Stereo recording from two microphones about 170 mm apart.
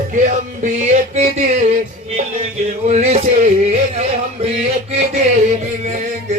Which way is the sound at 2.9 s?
40° right (ahead or behind).